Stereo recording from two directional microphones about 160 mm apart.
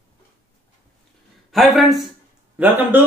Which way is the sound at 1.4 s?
Centre (ahead or behind).